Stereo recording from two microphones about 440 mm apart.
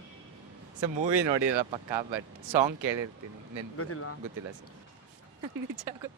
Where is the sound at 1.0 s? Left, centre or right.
Right.